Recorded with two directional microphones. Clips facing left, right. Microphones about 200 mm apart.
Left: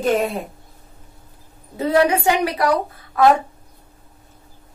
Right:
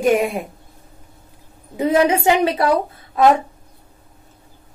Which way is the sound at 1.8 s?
20° right (ahead or behind).